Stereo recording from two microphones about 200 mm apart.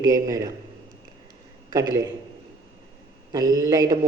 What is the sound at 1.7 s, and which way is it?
Speech, 15° right (ahead or behind).